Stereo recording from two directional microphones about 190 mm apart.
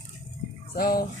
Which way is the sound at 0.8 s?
50° left (ahead or behind).